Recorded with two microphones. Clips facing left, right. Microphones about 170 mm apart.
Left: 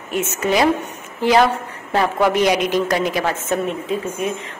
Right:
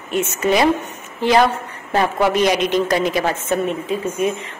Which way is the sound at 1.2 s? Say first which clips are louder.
Even; centre (ahead or behind).